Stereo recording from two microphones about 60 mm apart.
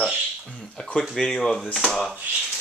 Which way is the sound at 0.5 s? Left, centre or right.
Centre.